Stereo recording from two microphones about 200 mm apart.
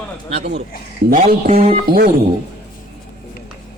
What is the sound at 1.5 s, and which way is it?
Speech, 40° right (ahead or behind).